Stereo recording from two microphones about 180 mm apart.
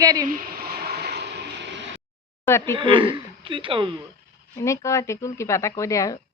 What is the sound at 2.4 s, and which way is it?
Speech, 15° left (ahead or behind).